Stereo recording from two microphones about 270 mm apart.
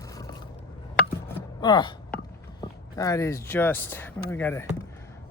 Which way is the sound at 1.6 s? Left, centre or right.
Centre.